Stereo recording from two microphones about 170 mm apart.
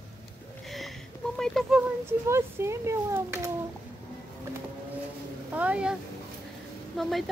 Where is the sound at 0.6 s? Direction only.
Centre (ahead or behind).